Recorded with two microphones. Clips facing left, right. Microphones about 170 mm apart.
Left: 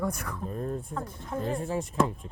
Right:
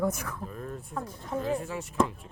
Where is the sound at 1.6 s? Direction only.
35° left (ahead or behind).